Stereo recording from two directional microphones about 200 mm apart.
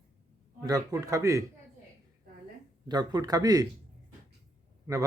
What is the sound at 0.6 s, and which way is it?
Speech, 15° right (ahead or behind).